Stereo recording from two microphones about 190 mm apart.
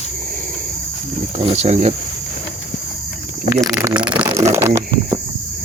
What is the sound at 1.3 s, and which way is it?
Speech, 35° right (ahead or behind).